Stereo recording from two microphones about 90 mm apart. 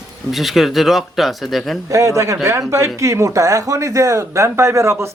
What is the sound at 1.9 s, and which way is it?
Speech, 35° right (ahead or behind).